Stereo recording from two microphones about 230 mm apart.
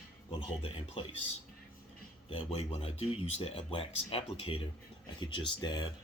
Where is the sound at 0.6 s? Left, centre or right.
Left.